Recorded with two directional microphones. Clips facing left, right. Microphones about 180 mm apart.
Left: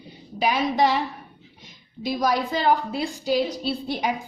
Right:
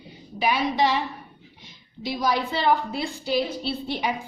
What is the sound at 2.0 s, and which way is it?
A woman's voice, 45° left (ahead or behind).